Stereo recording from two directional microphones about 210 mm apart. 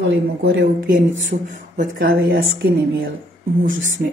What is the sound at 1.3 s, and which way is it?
Speech, 35° right (ahead or behind).